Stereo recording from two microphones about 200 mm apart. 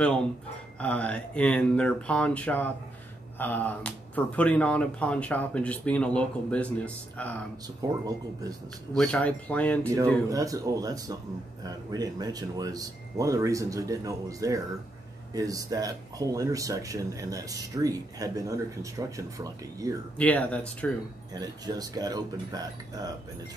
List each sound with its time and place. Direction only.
0.7 s speech: 5° left (ahead or behind)
7.8 s speech: 20° right (ahead or behind)
8.9 s speech: 5° left (ahead or behind)
10.3 s speech: 15° right (ahead or behind)
20.2 s speech: 5° left (ahead or behind)
21.3 s speech: 20° right (ahead or behind)